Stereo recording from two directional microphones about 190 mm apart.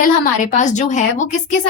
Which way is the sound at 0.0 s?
40° left (ahead or behind).